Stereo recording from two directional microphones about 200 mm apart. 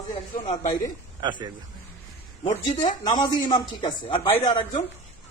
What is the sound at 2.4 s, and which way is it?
A man's voice, 30° left (ahead or behind).